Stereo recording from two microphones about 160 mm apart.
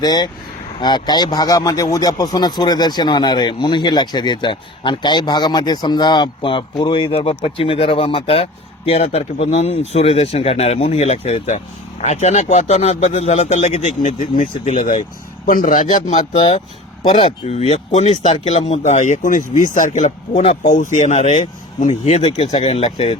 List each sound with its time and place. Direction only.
0.0 s speech: 25° left (ahead or behind); by 23.1 s 40° left (ahead or behind)